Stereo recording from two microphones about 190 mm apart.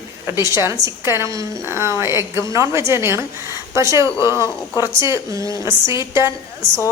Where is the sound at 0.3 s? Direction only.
15° right (ahead or behind).